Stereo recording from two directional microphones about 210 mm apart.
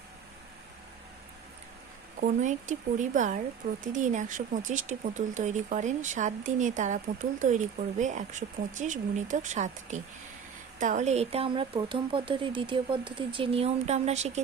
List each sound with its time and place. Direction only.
2.2 s speech: 35° right (ahead or behind)